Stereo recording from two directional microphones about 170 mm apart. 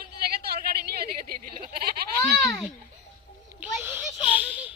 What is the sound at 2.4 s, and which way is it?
Speech, 20° left (ahead or behind).